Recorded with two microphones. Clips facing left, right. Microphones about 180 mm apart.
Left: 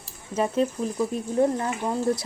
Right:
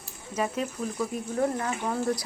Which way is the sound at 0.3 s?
30° left (ahead or behind).